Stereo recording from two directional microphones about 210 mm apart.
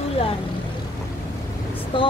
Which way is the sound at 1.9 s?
25° left (ahead or behind).